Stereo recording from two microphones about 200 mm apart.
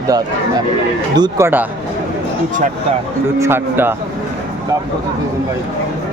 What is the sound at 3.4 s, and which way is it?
Speech, 10° right (ahead or behind).